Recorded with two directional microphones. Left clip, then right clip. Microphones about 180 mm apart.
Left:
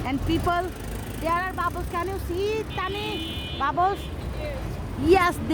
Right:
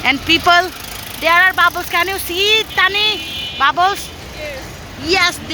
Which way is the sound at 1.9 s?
5° right (ahead or behind).